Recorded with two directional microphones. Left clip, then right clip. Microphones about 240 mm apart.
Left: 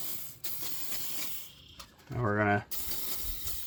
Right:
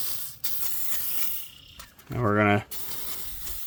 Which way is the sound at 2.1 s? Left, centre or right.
Right.